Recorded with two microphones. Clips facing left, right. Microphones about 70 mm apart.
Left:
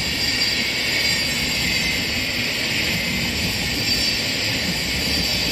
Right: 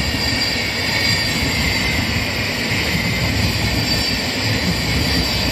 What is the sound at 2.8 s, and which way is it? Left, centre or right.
Vehicle, right.